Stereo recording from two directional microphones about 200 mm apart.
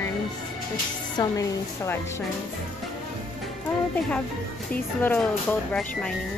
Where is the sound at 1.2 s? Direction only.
15° left (ahead or behind).